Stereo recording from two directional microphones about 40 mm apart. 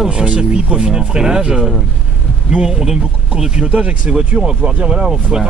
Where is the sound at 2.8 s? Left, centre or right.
Centre.